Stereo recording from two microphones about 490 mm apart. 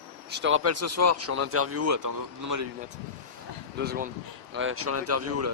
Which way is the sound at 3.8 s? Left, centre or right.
Centre.